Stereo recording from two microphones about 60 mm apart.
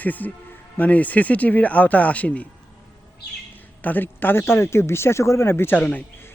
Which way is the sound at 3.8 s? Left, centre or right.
Left.